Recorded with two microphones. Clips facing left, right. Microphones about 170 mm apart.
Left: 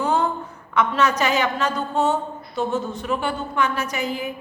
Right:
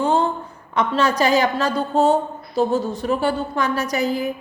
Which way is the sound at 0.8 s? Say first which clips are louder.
Right 1 dB; 30° right (ahead or behind).